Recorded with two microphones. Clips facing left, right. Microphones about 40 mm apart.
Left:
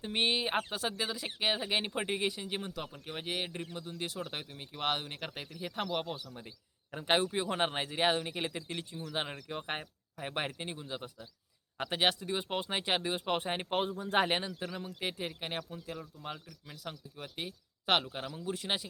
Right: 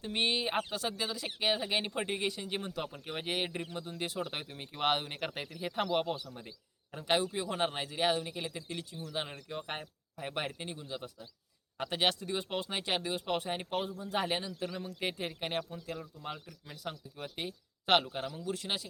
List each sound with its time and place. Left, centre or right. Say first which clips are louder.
0.0 s speech: left 1 dB; centre
6.9 s speech: left 1 dB; left
9.5 s speech: left 1 dB; centre; by 14.5 s left
14.6 s speech: right 1 dB; centre
18.3 s speech: left 1 dB; centre